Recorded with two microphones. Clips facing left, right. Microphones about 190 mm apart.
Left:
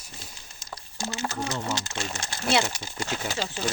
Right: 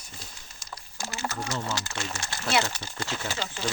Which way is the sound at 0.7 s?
20° left (ahead or behind).